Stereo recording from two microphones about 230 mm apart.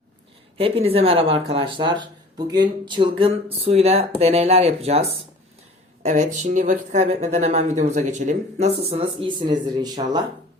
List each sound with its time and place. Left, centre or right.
0.5 s speech: right